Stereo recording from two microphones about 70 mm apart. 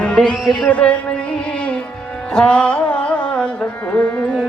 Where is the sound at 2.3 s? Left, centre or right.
Centre.